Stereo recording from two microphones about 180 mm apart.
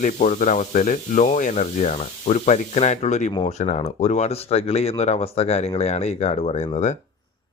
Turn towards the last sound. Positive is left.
turn(degrees=35)  # may be behind; listen again after turning